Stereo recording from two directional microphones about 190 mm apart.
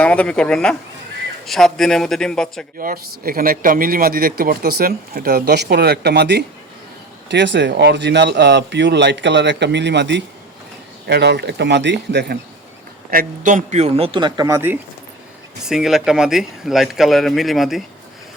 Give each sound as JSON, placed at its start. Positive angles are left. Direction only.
{"t": 0.0, "sound": "speech", "side_deg": 5}
{"t": 2.7, "sound": "speech", "side_deg": -50}
{"t": 13.1, "sound": "a man's voice", "side_deg": -45}
{"t": 15.6, "sound": "speech", "side_deg": 0}